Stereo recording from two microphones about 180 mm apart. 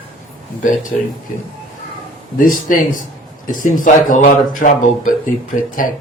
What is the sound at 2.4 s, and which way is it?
Speech, 50° left (ahead or behind).